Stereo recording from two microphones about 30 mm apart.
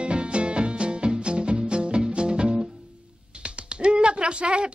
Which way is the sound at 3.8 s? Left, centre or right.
Right.